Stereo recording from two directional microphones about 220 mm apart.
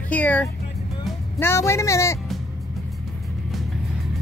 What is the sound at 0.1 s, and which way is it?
Speech, 5° left (ahead or behind).